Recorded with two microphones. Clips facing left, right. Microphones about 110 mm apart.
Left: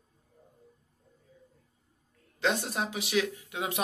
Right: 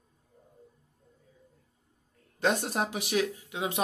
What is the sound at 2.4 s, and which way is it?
Speech, 50° right (ahead or behind).